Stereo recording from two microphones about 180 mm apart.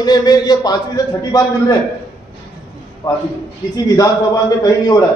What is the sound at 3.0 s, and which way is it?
Speech, 20° left (ahead or behind).